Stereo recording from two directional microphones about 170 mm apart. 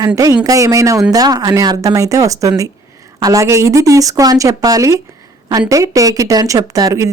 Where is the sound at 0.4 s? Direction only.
20° right (ahead or behind).